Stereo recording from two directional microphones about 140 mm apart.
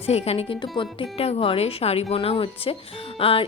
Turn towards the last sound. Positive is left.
turn(degrees=40)  # may be behind; listen again after turning